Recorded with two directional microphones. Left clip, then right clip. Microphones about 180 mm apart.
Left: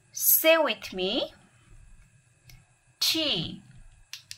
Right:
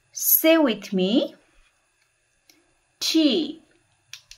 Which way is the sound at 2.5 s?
5° left (ahead or behind).